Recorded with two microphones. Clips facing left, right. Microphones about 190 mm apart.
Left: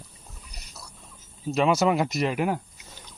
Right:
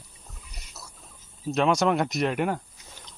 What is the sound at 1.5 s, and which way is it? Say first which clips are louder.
Speech: left 1 dB; centre (ahead or behind).